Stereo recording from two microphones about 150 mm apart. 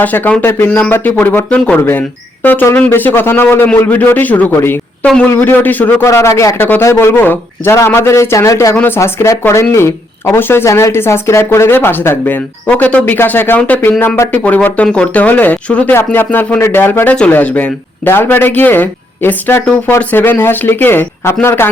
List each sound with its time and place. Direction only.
0.0 s speech: 10° left (ahead or behind)